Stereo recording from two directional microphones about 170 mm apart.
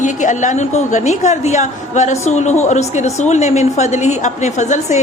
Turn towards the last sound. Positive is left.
turn(degrees=45)  # may be behind; listen again after turning